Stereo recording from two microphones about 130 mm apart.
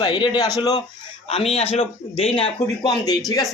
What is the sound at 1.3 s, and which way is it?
Speech, 50° left (ahead or behind).